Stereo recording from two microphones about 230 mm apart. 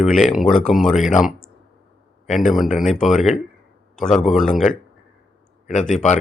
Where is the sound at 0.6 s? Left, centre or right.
Centre.